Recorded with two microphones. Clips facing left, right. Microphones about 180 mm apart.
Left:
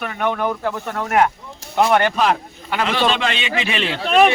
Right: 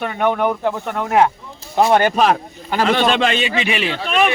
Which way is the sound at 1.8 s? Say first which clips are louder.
Right 2 dB; 30° right (ahead or behind).